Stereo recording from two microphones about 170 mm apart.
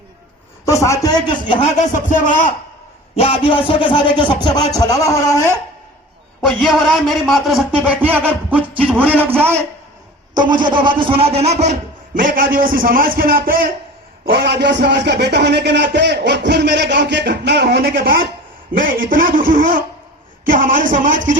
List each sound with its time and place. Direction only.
0.6 s speech: 20° left (ahead or behind)
1.8 s a man's voice: 50° left (ahead or behind)
3.2 s a man's voice: 35° left (ahead or behind); by 5.5 s 15° left (ahead or behind)
6.4 s a man's voice: centre (ahead or behind)
10.5 s a man's voice: 30° right (ahead or behind); by 13.6 s 60° right (ahead or behind)
14.3 s a man's voice: 80° right; by 21.3 s 50° right (ahead or behind)